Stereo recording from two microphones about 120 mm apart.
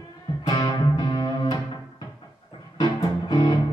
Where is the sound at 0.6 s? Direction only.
35° left (ahead or behind).